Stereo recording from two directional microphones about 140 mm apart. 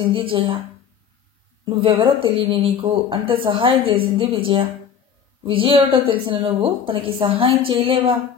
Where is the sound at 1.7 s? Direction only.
40° right (ahead or behind).